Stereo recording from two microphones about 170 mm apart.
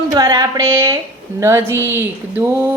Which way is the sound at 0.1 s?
20° right (ahead or behind).